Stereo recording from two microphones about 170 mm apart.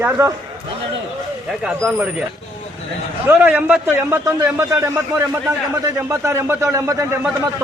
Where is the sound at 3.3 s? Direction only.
10° right (ahead or behind).